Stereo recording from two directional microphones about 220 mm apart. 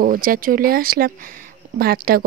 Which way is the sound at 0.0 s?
40° right (ahead or behind).